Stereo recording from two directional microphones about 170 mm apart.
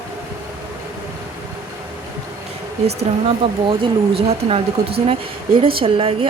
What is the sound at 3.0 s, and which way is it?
Speech, 30° right (ahead or behind).